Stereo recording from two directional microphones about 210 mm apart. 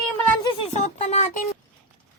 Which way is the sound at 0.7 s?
35° left (ahead or behind).